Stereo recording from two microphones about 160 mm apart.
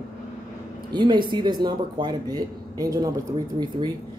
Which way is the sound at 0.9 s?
30° right (ahead or behind).